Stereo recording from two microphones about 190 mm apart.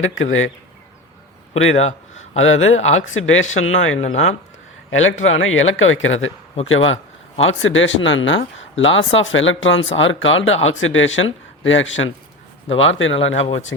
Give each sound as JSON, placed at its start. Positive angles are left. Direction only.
{"t": 0.0, "sound": "speech", "side_deg": 90}
{"t": 1.7, "sound": "speech", "side_deg": 35}
{"t": 2.1, "sound": "speech", "side_deg": 90}
{"t": 3.6, "sound": "speech", "side_deg": 35}
{"t": 4.9, "sound": "speech", "side_deg": 90}